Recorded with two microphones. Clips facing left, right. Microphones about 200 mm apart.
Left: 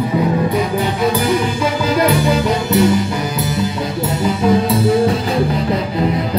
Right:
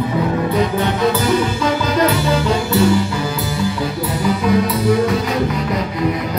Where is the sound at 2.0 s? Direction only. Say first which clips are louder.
Left 2 dB; 15° left (ahead or behind).